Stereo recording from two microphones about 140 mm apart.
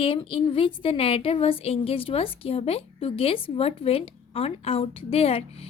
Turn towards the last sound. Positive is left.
turn(degrees=45)  # may be behind; listen again after turning